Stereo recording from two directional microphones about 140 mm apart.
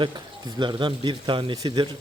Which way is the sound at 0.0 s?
30° right (ahead or behind).